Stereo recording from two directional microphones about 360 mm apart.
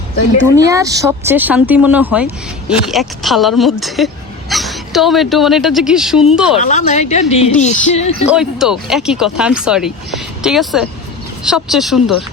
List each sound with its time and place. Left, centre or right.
0.5 s speech: centre
6.6 s a woman's voice: left
7.6 s music: centre
8.3 s speech: centre